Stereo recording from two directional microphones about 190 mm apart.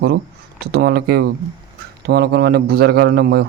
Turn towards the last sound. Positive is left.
turn(degrees=-55)  # may be behind; listen again after turning